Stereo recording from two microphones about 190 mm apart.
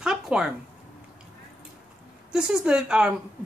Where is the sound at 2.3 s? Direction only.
5° right (ahead or behind).